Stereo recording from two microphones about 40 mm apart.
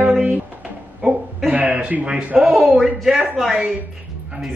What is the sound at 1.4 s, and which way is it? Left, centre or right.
Speech, right.